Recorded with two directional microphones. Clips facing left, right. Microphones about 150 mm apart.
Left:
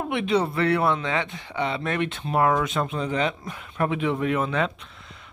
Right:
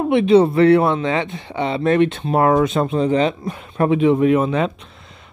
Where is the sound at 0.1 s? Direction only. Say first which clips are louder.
Right 11 dB; 30° right (ahead or behind).